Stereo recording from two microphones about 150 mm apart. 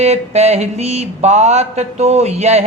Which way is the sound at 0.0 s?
45° right (ahead or behind).